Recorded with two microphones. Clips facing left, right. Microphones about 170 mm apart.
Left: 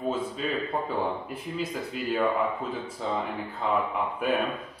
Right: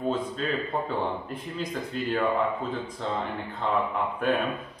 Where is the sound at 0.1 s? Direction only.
5° left (ahead or behind).